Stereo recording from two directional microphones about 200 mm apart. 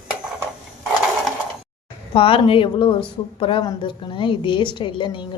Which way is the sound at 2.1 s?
25° left (ahead or behind).